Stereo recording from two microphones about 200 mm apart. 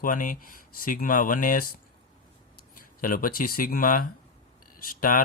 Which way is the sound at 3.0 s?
45° left (ahead or behind).